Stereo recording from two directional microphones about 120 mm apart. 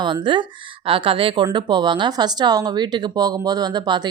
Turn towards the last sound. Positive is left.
turn(degrees=-35)  # may be behind; listen again after turning